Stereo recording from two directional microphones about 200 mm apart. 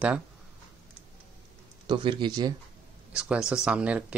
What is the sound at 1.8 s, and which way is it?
Speech, 25° right (ahead or behind).